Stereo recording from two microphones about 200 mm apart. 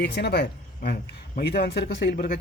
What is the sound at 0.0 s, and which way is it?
Speech, 55° left (ahead or behind).